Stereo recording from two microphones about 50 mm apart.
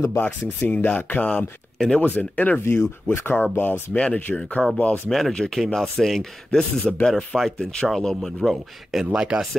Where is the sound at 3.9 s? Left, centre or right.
Left.